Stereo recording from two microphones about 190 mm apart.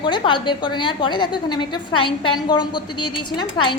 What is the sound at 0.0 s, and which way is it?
A woman's voice, 25° left (ahead or behind).